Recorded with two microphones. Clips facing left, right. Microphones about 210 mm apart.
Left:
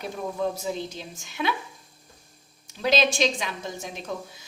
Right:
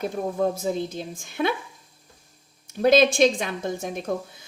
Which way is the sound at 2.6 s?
50° right (ahead or behind).